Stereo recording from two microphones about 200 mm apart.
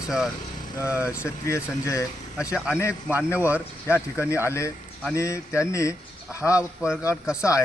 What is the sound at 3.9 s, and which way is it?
Speech, 15° left (ahead or behind).